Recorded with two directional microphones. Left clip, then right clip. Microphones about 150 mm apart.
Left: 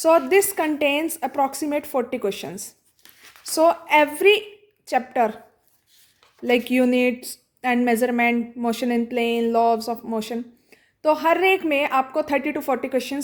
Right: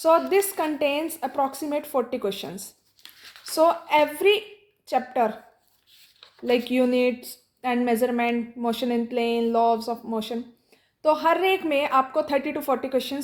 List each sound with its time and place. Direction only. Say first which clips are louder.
0.0 s a woman's voice: left 3 dB; 40° left (ahead or behind)
6.5 s a woman's voice: left 2 dB; 40° left (ahead or behind)